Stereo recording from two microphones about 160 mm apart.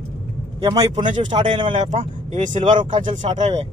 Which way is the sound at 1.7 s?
50° right (ahead or behind).